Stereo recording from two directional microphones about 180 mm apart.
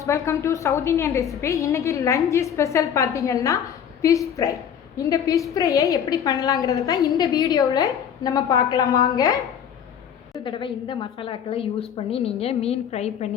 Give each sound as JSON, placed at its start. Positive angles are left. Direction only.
{"t": 0.0, "sound": "a woman's voice", "side_deg": 15}
{"t": 10.4, "sound": "a woman's voice", "side_deg": 25}